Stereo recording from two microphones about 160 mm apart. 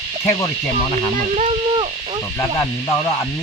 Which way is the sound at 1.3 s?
35° right (ahead or behind).